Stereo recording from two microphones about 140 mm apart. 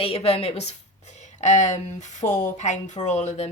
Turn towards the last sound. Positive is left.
turn(degrees=55)  # may be behind; listen again after turning